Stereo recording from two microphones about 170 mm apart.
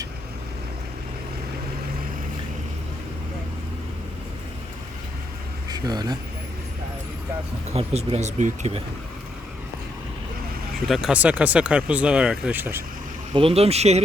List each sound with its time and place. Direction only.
5.6 s speech: 25° right (ahead or behind)
7.7 s speech: 35° right (ahead or behind)
10.8 s speech: centre (ahead or behind)
13.3 s speech: 35° right (ahead or behind)